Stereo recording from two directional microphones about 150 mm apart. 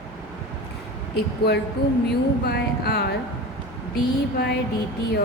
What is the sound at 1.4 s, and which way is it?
Speech, 90° left.